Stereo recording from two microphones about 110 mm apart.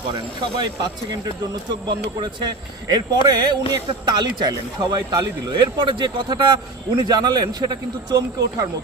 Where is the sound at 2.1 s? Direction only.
40° right (ahead or behind).